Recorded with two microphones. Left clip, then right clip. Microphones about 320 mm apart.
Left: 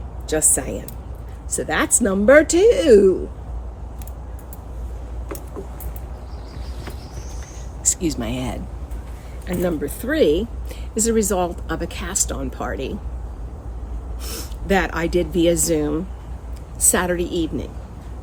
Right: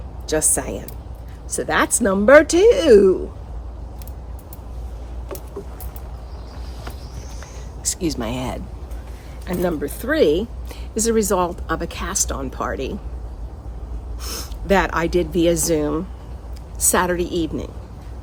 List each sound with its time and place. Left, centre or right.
0.3 s speech: centre
7.9 s speech: centre
14.2 s speech: centre